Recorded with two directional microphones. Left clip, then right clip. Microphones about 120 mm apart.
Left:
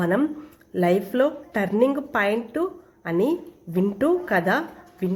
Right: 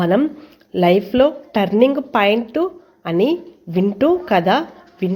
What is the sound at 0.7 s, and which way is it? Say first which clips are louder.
A woman's voice: right 7 dB; 20° right (ahead or behind).